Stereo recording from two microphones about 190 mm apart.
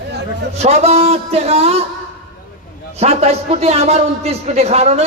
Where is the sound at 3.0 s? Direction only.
35° right (ahead or behind).